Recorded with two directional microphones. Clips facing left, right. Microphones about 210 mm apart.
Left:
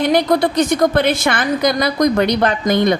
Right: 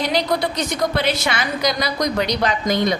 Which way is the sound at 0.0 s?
50° left (ahead or behind).